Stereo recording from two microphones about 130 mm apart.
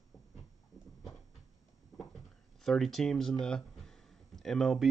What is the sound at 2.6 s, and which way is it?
Speech, centre (ahead or behind).